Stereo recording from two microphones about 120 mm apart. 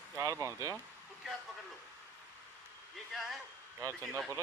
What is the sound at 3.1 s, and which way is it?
Speech, centre (ahead or behind).